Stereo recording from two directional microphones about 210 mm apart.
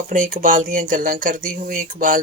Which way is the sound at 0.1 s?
40° right (ahead or behind).